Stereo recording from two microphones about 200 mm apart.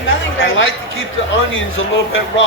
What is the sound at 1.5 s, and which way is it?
Speech, 75° left (ahead or behind).